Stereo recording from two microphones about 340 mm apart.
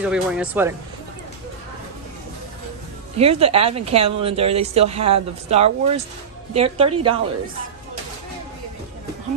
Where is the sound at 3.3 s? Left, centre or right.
Centre.